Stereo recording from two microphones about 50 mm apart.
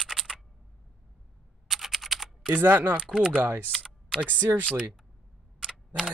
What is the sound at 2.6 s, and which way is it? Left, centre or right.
Speech, right.